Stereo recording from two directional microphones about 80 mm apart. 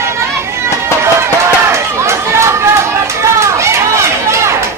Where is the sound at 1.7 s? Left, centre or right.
Right.